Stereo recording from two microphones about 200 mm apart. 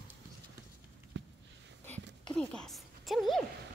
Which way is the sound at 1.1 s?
65° right (ahead or behind).